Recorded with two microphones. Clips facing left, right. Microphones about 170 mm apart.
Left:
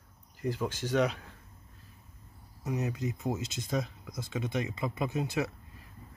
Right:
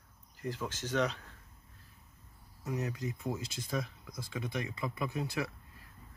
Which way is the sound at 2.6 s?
20° left (ahead or behind).